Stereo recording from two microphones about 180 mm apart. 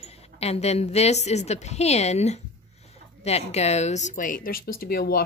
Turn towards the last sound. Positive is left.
turn(degrees=55)  # may be behind; listen again after turning